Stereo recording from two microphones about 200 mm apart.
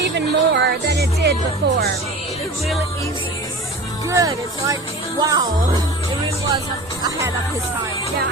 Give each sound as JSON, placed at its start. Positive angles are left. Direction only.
{"t": 0.0, "sound": "speech", "side_deg": -60}
{"t": 4.1, "sound": "speech", "side_deg": -15}